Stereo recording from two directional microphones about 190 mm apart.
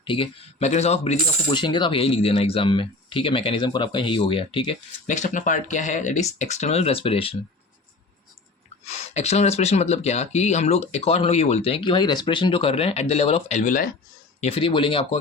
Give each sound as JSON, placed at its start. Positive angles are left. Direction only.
{"t": 0.0, "sound": "speech", "side_deg": 25}
{"t": 5.0, "sound": "speech", "side_deg": 40}
{"t": 8.8, "sound": "speech", "side_deg": 35}
{"t": 14.4, "sound": "speech", "side_deg": 30}